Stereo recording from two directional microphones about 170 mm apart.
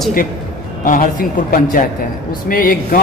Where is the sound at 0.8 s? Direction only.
55° left (ahead or behind).